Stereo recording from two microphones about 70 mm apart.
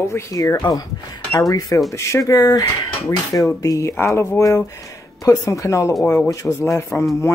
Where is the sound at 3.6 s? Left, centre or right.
Left.